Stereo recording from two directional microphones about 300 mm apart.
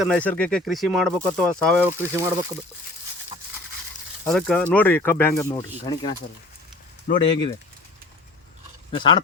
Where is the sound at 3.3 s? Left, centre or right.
Right.